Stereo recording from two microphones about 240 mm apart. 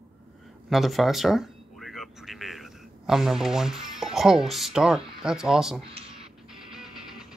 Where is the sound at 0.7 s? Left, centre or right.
Centre.